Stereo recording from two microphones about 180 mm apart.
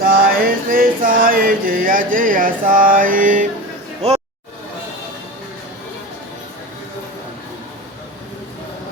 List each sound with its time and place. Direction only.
0.0 s music: 55° right (ahead or behind)